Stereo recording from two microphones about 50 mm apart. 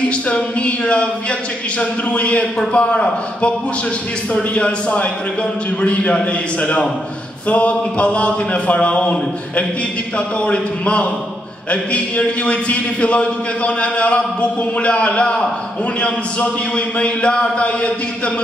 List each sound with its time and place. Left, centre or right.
0.1 s a man's voice: left
4.3 s a man's voice: left
12.4 s a man's voice: left